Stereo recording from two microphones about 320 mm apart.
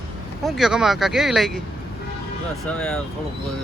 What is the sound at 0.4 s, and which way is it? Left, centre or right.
Speech, centre.